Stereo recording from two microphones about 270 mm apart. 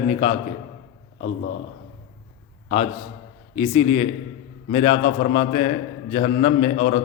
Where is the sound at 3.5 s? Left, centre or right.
Left.